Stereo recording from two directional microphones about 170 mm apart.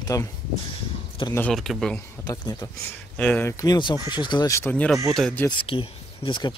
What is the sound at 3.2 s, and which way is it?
Speech, 10° left (ahead or behind).